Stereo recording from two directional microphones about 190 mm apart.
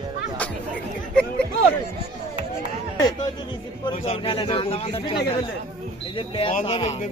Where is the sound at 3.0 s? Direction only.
25° left (ahead or behind).